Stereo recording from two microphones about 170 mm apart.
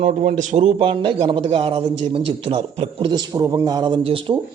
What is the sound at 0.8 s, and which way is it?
A man's voice, 30° right (ahead or behind).